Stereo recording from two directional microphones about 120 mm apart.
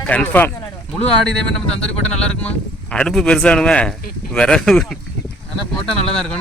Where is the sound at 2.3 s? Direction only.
10° left (ahead or behind).